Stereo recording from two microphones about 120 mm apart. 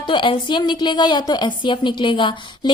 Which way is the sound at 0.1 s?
45° left (ahead or behind).